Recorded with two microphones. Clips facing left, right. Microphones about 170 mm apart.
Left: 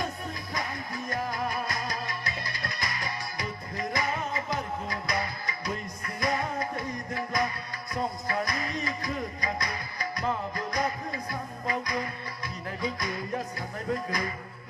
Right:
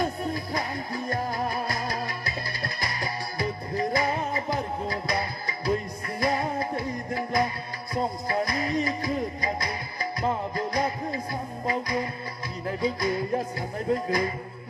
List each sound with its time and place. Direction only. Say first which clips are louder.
0.2 s music: right 6 dB; 35° right (ahead or behind)